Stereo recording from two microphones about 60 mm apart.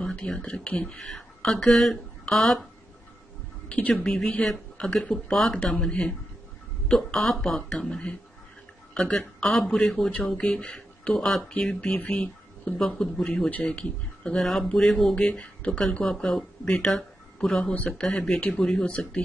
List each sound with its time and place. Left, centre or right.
0.0 s speech: centre
1.1 s speech: centre
3.6 s speech: centre
11.1 s speech: centre
11.4 s speech: centre
12.1 s a sound: centre
13.1 s speech: centre
14.4 s speech: centre
15.1 s speech: centre